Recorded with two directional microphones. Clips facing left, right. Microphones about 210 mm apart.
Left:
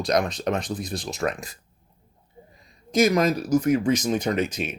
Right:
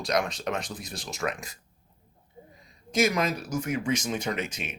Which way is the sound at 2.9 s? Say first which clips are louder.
Left 6 dB; 35° left (ahead or behind).